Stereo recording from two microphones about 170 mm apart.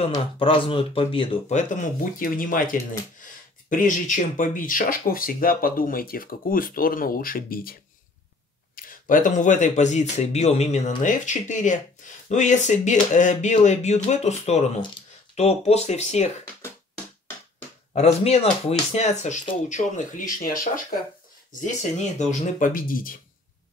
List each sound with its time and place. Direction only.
0.1 s speech: 30° left (ahead or behind)
1.6 s speech: 50° left (ahead or behind)
8.7 s speech: 55° left (ahead or behind)
17.9 s speech: 40° left (ahead or behind); by 23.1 s 55° left (ahead or behind)